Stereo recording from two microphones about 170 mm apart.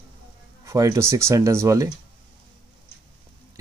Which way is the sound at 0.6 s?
20° right (ahead or behind).